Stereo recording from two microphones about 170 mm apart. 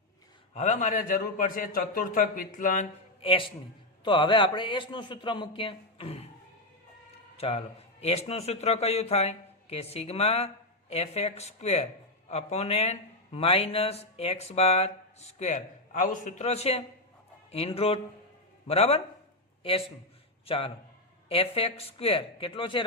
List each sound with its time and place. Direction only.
0.5 s a man's voice: 45° left (ahead or behind)
3.2 s a man's voice: 30° left (ahead or behind)
7.3 s a man's voice: 35° left (ahead or behind)